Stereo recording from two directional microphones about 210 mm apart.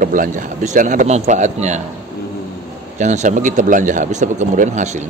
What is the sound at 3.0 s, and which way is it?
Speech, 35° right (ahead or behind).